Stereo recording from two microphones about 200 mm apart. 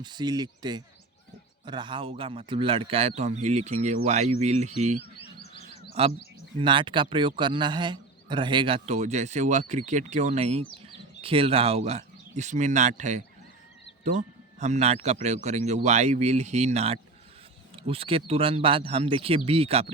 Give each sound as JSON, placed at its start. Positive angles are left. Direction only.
{"t": 0.0, "sound": "a man's voice", "side_deg": -20}
{"t": 6.0, "sound": "a man's voice", "side_deg": -30}